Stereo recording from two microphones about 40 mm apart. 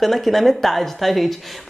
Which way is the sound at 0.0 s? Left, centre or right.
Centre.